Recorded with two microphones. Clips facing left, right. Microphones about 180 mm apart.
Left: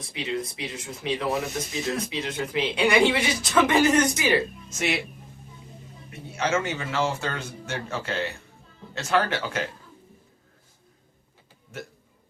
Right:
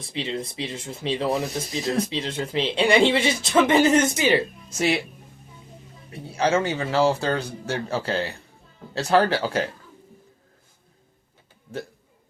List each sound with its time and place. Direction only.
0.0 s speech: 30° right (ahead or behind)
6.1 s a man's voice: 35° right (ahead or behind)